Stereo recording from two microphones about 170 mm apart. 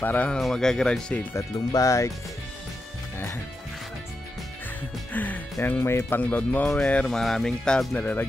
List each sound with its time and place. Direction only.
0.0 s speech: 10° left (ahead or behind)
1.7 s speech: 20° left (ahead or behind)
5.1 s speech: 10° left (ahead or behind)